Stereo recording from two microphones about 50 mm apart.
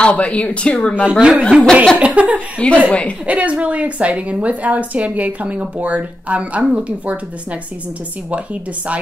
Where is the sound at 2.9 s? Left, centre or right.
Left.